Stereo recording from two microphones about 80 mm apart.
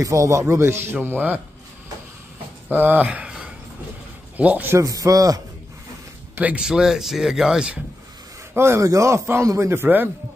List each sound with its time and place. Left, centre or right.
0.0 s a man's voice: right
2.7 s a man's voice: right
4.7 s speech: right
6.4 s speech: centre
8.5 s a man's voice: right